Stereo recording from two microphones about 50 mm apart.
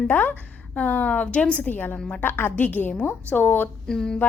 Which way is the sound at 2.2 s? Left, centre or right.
Left.